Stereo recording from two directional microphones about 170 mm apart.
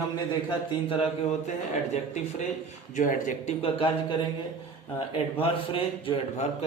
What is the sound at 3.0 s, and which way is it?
Speech, 50° left (ahead or behind).